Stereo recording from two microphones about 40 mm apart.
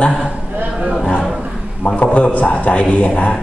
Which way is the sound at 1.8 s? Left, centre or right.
Left.